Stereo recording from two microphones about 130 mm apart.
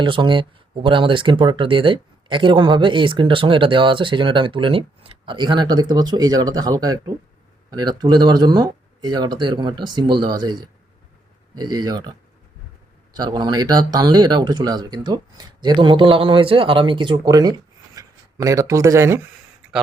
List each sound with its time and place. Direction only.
0.0 s speech: 40° right (ahead or behind)
13.1 s speech: 35° right (ahead or behind)
18.0 s a sound: 30° right (ahead or behind)
18.4 s speech: 25° right (ahead or behind)